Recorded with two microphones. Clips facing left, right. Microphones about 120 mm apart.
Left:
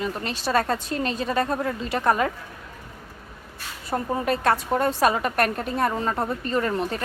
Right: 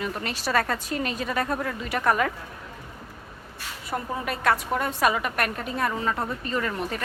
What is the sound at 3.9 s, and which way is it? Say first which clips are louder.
A woman's voice: left 5 dB; 30° left (ahead or behind).